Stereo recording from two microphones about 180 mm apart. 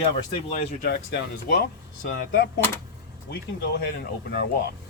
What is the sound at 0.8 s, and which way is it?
Speech, 60° left (ahead or behind).